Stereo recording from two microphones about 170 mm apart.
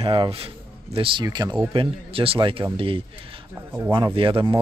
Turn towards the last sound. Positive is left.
turn(degrees=-30)  # may be behind; listen again after turning